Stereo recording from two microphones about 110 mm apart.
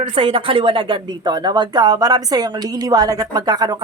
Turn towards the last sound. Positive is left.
turn(degrees=-40)  # may be behind; listen again after turning